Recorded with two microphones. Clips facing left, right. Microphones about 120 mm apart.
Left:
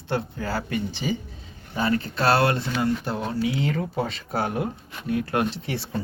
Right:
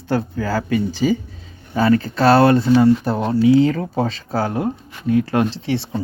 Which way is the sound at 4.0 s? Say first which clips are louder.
Right 6 dB; 90° right.